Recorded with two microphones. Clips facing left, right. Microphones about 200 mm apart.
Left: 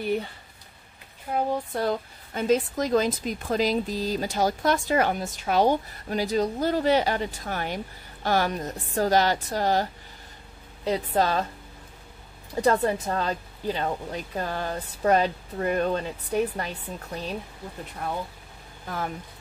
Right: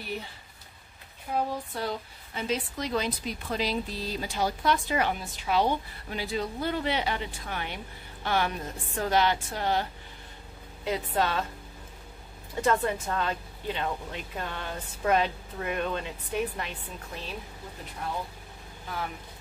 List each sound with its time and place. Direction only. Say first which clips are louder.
1.8 s a woman's voice: left 6 dB; 50° left (ahead or behind)
12.6 s a woman's voice: left 4 dB; 35° left (ahead or behind)